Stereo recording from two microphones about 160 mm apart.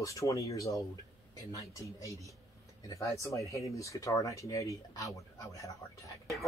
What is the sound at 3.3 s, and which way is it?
Speech, 20° left (ahead or behind).